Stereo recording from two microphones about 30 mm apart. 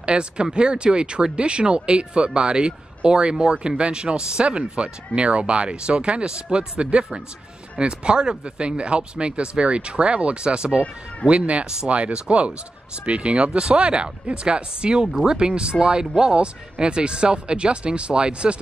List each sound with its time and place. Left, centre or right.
0.0 s speech: right
7.8 s speech: right
11.2 s speech: right